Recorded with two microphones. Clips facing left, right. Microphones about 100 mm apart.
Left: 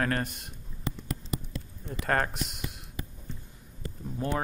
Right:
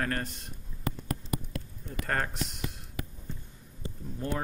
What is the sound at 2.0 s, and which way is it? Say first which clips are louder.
Speech: left 4 dB; 85° left.